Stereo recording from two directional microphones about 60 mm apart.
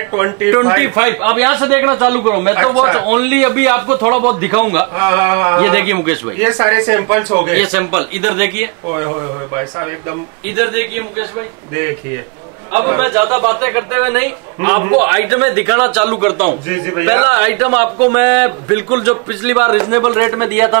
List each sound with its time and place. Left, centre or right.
0.1 s a man's voice: right
10.5 s a man's voice: right
12.7 s a man's voice: right